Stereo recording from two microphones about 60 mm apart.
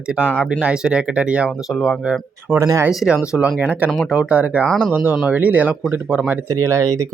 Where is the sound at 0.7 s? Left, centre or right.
Centre.